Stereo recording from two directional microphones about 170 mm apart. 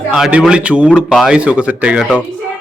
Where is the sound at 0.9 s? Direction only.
10° left (ahead or behind).